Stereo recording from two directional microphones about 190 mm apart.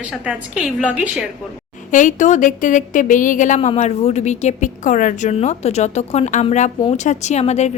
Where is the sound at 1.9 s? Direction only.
40° left (ahead or behind).